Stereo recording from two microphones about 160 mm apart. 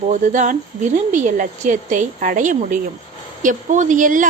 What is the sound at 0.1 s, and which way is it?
A woman's voice, 50° right (ahead or behind).